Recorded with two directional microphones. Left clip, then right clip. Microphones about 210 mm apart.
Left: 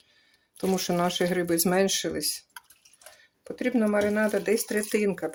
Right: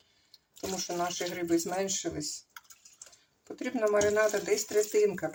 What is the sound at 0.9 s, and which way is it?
Speech, 60° left (ahead or behind).